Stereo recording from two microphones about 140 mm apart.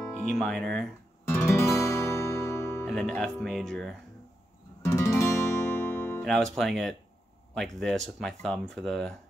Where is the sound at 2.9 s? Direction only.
5° left (ahead or behind).